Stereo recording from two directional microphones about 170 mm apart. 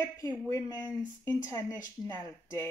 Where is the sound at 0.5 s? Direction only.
20° left (ahead or behind).